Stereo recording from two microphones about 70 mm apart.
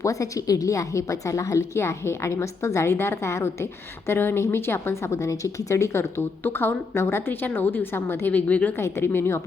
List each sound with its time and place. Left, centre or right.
0.0 s a woman's voice: left
8.3 s a woman's voice: left
8.8 s a woman's voice: left